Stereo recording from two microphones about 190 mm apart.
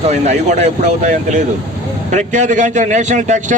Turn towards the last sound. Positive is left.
turn(degrees=-40)  # may be behind; listen again after turning